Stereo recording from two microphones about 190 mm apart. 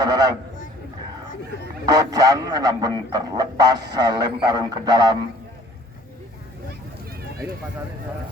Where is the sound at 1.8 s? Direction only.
20° right (ahead or behind).